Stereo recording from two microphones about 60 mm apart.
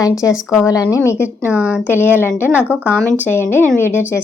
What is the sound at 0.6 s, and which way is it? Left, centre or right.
Speech, left.